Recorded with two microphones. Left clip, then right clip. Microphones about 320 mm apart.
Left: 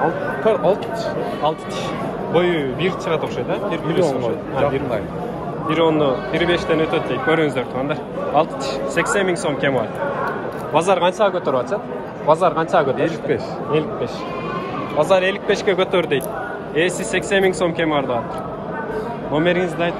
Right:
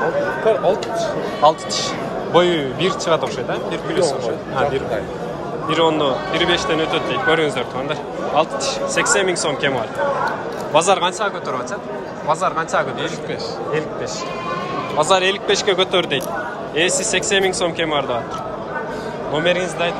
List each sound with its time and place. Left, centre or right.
0.5 s speech: centre
2.3 s speech: centre
5.7 s speech: centre
15.0 s speech: centre
19.3 s speech: centre